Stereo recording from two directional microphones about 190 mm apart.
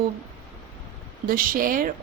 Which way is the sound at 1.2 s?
45° right (ahead or behind).